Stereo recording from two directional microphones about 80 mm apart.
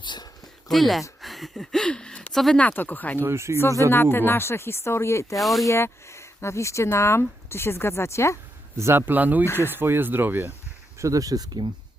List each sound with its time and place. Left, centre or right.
0.0 s a sound: left
0.7 s speech: centre
1.2 s a sound: centre
2.3 s speech: centre
2.6 s speech: centre
3.2 s speech: right
3.9 s speech: left
5.4 s speech: centre
5.6 s speech: left
8.8 s speech: right
9.5 s speech: left
9.7 s speech: right
10.9 s speech: right